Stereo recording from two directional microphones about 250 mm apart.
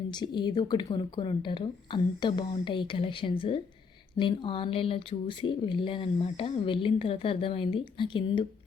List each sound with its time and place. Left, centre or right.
0.1 s speech: centre